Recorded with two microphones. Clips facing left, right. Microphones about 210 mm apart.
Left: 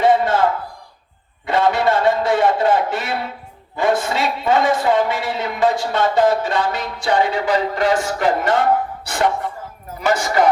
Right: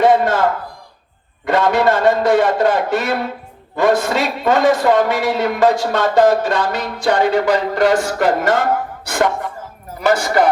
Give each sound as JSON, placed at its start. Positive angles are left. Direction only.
{"t": 0.0, "sound": "a sound", "side_deg": -45}
{"t": 1.5, "sound": "a man's voice", "side_deg": -45}
{"t": 10.0, "sound": "a man's voice", "side_deg": -60}